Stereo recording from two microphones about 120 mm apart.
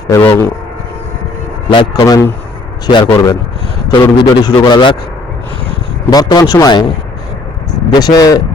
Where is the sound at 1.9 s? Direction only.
25° left (ahead or behind).